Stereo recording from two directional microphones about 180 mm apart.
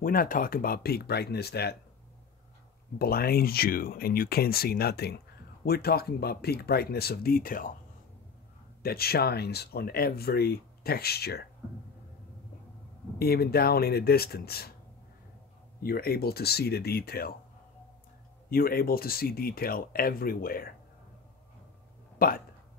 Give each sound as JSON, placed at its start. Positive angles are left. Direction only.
{"t": 0.0, "sound": "speech", "side_deg": 55}
{"t": 3.0, "sound": "speech", "side_deg": 60}
{"t": 8.8, "sound": "speech", "side_deg": 60}
{"t": 13.2, "sound": "speech", "side_deg": 60}
{"t": 15.8, "sound": "speech", "side_deg": 55}
{"t": 18.5, "sound": "speech", "side_deg": 55}
{"t": 22.2, "sound": "speech", "side_deg": 55}